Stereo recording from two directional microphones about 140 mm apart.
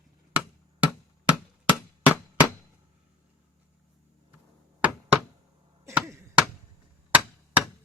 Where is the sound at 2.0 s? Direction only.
10° right (ahead or behind).